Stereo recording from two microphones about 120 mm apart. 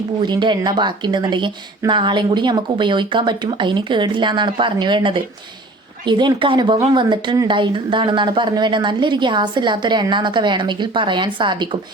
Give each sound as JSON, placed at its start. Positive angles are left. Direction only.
{"t": 0.2, "sound": "a woman's voice", "side_deg": -40}